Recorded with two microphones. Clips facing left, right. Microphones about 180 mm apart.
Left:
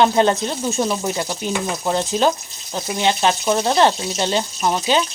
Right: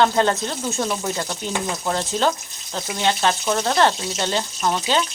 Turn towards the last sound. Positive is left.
turn(degrees=15)  # may be behind; listen again after turning